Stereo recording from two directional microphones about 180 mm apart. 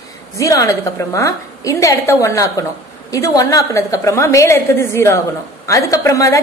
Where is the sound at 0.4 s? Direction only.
20° left (ahead or behind).